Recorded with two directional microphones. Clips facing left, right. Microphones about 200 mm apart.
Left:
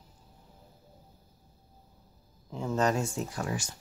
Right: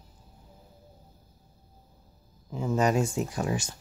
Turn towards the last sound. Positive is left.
turn(degrees=-20)  # may be behind; listen again after turning